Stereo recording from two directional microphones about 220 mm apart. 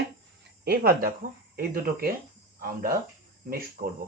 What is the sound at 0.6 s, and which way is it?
Speech, 40° right (ahead or behind).